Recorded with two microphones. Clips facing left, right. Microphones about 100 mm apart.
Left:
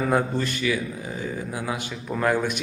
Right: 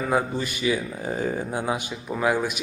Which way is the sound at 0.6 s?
25° right (ahead or behind).